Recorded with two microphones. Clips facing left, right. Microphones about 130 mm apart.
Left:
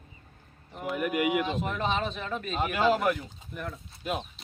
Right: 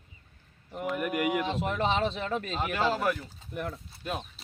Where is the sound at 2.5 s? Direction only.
10° left (ahead or behind).